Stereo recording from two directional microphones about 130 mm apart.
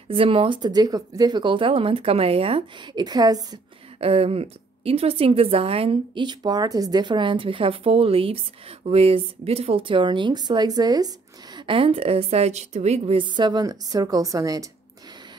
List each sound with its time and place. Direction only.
0.1 s speech: 45° right (ahead or behind); by 3.5 s 30° right (ahead or behind)
4.0 s a woman's voice: 50° right (ahead or behind); by 14.7 s 25° right (ahead or behind)